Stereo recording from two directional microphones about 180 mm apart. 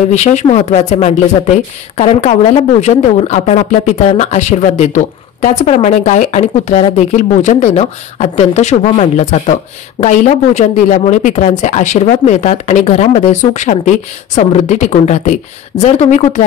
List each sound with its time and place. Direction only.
0.1 s speech: 40° left (ahead or behind)